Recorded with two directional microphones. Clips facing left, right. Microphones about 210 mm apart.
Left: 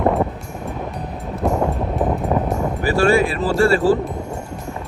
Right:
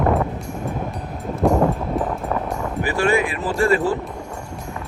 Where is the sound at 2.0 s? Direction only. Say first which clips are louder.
Left 5 dB; 20° left (ahead or behind).